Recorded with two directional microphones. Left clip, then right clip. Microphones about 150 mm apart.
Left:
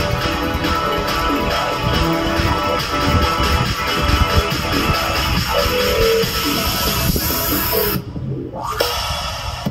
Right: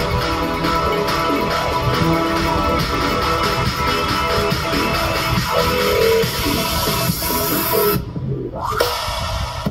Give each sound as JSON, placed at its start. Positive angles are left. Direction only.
{"t": 0.8, "sound": "music", "side_deg": 15}
{"t": 3.8, "sound": "music", "side_deg": 15}